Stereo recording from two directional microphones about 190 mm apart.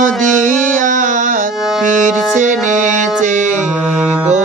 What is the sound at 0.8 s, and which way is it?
Music, 40° right (ahead or behind).